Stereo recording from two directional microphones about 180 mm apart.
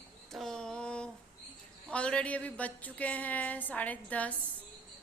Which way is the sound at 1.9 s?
5° left (ahead or behind).